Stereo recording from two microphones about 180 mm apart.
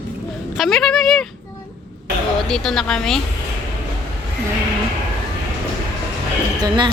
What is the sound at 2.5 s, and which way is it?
Speech, centre (ahead or behind).